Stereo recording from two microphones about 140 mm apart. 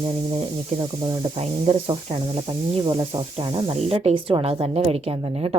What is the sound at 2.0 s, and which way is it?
Speech, 45° right (ahead or behind).